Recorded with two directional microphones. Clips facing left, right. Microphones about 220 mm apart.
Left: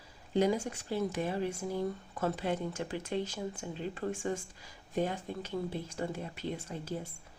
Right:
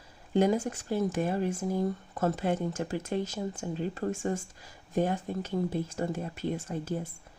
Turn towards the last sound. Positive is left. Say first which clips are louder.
# right 5 dB
turn(degrees=-50)  # may be behind; listen again after turning